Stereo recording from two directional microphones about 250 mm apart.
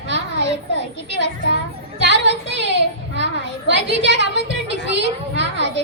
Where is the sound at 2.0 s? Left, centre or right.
Right.